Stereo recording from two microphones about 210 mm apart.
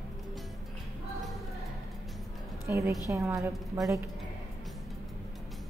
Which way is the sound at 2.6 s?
15° right (ahead or behind).